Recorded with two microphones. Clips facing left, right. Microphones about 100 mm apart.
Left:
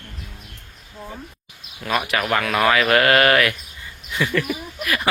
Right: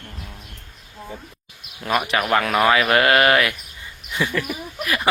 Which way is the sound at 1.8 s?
20° right (ahead or behind).